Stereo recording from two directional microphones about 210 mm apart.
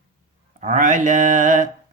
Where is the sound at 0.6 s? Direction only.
35° right (ahead or behind).